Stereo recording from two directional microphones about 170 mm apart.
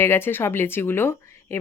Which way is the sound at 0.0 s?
15° left (ahead or behind).